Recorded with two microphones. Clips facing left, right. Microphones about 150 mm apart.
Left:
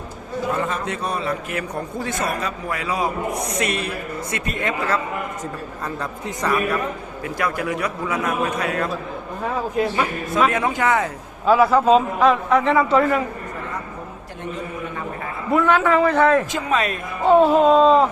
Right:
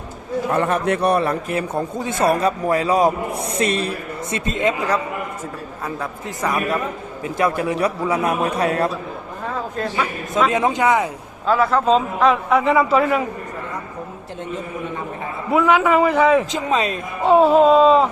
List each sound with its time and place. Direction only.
0.5 s a man's voice: 60° right (ahead or behind)
1.5 s a man's voice: 30° right (ahead or behind)
6.0 s a man's voice: 10° right (ahead or behind)
7.3 s a man's voice: 25° right (ahead or behind)
9.7 s speech: 10° left (ahead or behind)
10.5 s a man's voice: 20° right (ahead or behind)
11.4 s a man's voice: 5° left (ahead or behind)
15.5 s a man's voice: 10° right (ahead or behind)
16.5 s a man's voice: 20° right (ahead or behind)
17.2 s a man's voice: centre (ahead or behind)